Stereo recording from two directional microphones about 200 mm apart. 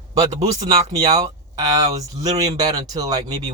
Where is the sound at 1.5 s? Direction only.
20° right (ahead or behind).